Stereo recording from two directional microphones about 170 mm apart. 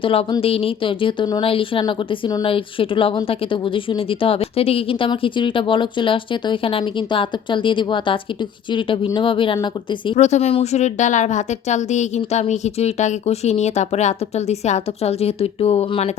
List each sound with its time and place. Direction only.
0.0 s speech: 30° left (ahead or behind)
10.2 s speech: 40° left (ahead or behind)